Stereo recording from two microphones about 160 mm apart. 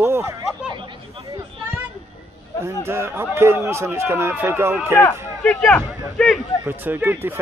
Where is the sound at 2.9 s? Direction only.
15° right (ahead or behind).